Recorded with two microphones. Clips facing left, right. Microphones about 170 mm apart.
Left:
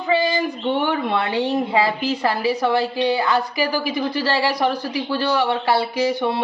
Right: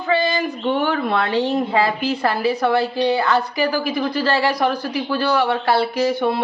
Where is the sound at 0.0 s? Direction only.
15° left (ahead or behind).